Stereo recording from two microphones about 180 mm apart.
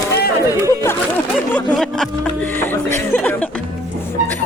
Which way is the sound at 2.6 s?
15° left (ahead or behind).